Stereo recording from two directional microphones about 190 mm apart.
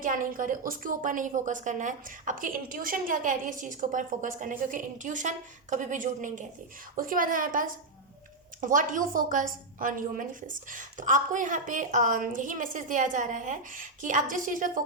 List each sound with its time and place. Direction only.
0.0 s a woman's voice: 45° right (ahead or behind)